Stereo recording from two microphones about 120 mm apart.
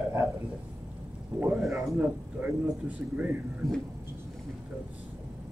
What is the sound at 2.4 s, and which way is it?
Speech, 15° right (ahead or behind).